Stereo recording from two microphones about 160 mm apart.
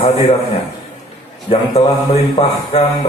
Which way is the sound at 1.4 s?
40° left (ahead or behind).